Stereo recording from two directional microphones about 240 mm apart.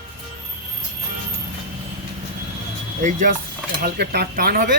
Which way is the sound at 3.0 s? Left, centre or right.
Right.